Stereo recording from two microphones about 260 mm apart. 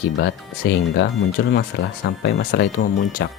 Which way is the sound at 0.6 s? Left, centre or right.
Left.